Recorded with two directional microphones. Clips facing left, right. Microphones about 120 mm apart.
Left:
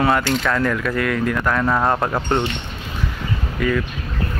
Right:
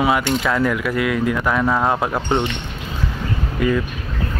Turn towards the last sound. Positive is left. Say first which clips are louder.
# right 2 dB
turn(degrees=-20)  # may be behind; listen again after turning